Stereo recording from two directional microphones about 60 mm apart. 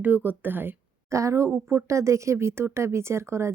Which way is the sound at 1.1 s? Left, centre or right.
Right.